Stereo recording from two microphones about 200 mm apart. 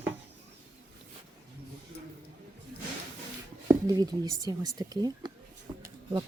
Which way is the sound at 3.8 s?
20° right (ahead or behind).